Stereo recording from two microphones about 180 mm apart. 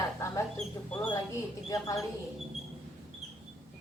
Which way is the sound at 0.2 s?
15° left (ahead or behind).